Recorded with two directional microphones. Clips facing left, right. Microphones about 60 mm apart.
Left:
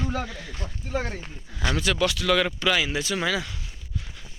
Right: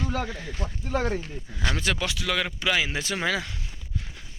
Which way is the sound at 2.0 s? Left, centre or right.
Centre.